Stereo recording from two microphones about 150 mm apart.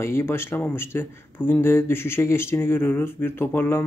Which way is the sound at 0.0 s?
15° left (ahead or behind).